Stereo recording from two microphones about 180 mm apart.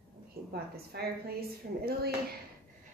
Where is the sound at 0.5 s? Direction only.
60° right (ahead or behind).